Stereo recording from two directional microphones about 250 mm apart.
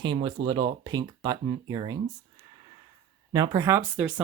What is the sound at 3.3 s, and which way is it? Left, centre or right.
Speech, centre.